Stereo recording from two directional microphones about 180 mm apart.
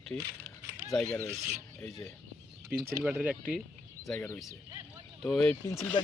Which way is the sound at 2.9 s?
10° right (ahead or behind).